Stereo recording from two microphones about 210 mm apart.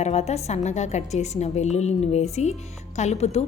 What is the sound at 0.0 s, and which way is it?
A woman's voice, 30° left (ahead or behind).